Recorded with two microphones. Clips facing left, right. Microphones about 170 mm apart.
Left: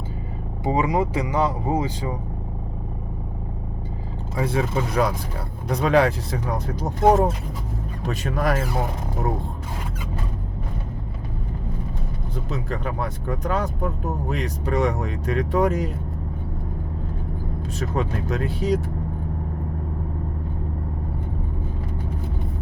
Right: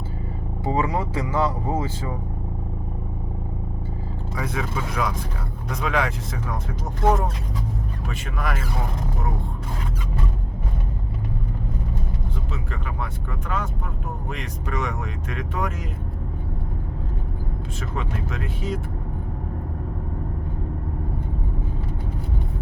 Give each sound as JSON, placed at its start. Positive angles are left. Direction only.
{"t": 0.6, "sound": "speech", "side_deg": 15}
{"t": 4.4, "sound": "speech", "side_deg": 30}
{"t": 12.5, "sound": "speech", "side_deg": 40}
{"t": 17.7, "sound": "speech", "side_deg": 40}